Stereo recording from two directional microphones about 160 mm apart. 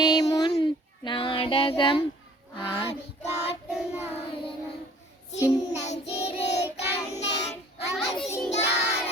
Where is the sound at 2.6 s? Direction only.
30° left (ahead or behind).